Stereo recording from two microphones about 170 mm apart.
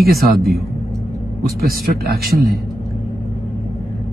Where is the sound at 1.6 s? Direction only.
65° right (ahead or behind).